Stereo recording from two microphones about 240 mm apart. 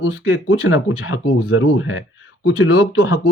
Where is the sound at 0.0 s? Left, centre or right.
Left.